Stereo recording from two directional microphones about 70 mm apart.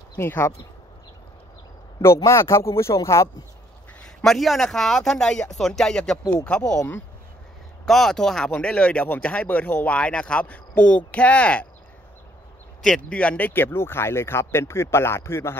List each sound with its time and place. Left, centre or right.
0.2 s speech: left
2.2 s speech: left
4.2 s speech: centre
7.8 s speech: centre
13.1 s speech: centre
13.5 s speech: left